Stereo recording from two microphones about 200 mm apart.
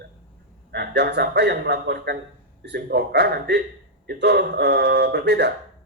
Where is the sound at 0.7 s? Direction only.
55° right (ahead or behind).